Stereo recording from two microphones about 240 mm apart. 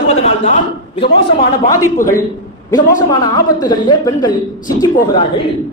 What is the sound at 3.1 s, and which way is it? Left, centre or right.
Speech, centre.